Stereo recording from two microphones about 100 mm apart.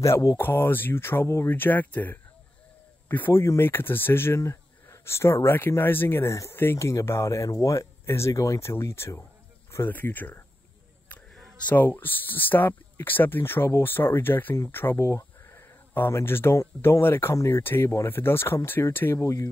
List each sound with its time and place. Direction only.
0.0 s speech: 35° left (ahead or behind)
0.4 s speech: 20° left (ahead or behind)
11.3 s a sound: 5° left (ahead or behind)
11.7 s speech: 20° left (ahead or behind)